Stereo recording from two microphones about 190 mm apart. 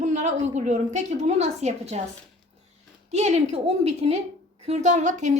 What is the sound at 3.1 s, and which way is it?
A woman's voice, 35° right (ahead or behind).